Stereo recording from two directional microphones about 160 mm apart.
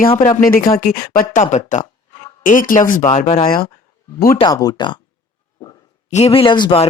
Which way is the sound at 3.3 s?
35° left (ahead or behind).